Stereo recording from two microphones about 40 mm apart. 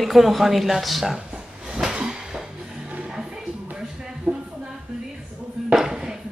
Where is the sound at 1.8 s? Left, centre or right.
Centre.